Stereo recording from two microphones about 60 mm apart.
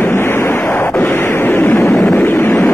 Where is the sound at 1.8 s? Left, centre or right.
Left.